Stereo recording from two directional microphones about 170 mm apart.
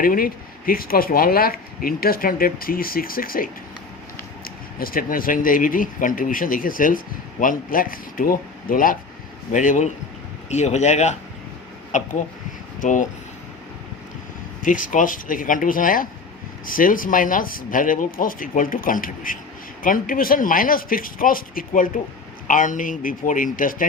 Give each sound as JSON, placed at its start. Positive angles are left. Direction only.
{"t": 0.0, "sound": "speech", "side_deg": 55}
{"t": 14.6, "sound": "speech", "side_deg": 50}